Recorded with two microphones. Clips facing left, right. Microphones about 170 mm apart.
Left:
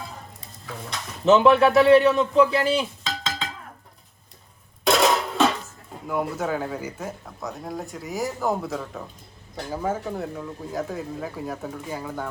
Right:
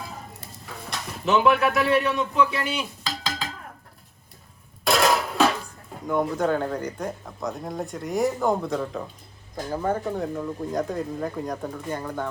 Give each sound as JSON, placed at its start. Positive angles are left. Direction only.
{"t": 1.2, "sound": "a man's voice", "side_deg": 30}
{"t": 3.0, "sound": "dishes", "side_deg": 0}
{"t": 4.9, "sound": "music", "side_deg": 0}
{"t": 6.1, "sound": "speech", "side_deg": 5}